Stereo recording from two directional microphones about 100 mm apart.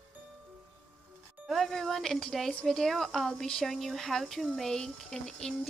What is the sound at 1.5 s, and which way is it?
A woman's voice, 5° left (ahead or behind).